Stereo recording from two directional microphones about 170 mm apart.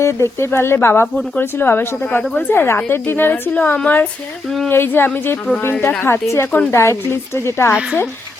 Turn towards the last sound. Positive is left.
turn(degrees=-5)  # may be behind; listen again after turning